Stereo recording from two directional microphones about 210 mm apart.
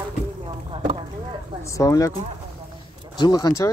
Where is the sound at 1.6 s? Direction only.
15° left (ahead or behind).